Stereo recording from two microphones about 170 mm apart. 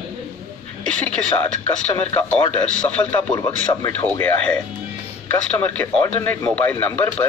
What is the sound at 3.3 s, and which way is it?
Speech, 25° left (ahead or behind).